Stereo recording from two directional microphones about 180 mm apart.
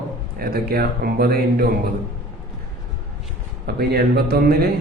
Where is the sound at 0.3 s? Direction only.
55° right (ahead or behind).